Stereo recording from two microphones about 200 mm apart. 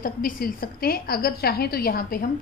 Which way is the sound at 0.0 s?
45° left (ahead or behind).